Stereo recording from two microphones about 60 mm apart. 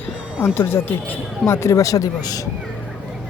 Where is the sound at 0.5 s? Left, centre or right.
Left.